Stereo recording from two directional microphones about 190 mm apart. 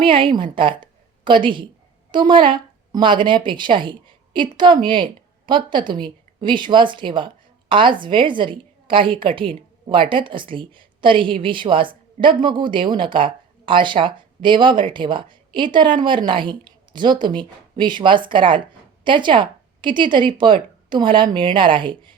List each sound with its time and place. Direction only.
0.0 s a woman's voice: 25° right (ahead or behind)